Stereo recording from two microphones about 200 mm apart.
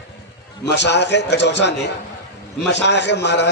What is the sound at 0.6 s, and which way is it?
A man's voice, 60° left (ahead or behind).